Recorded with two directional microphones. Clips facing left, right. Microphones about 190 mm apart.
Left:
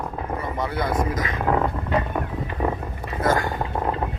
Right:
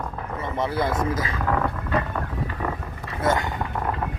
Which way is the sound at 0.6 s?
25° right (ahead or behind).